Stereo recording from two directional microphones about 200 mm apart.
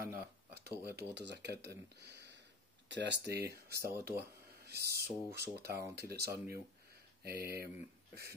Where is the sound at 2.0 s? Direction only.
60° right (ahead or behind).